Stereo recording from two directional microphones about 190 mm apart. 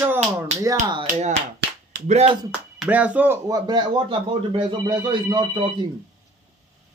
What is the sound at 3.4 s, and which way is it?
Speech, 20° right (ahead or behind).